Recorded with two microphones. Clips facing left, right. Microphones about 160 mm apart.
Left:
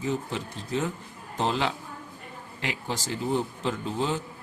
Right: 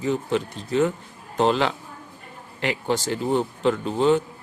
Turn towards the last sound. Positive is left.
turn(degrees=-65)  # may be behind; listen again after turning